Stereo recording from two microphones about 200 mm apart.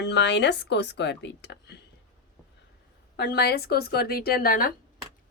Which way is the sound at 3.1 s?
55° left (ahead or behind).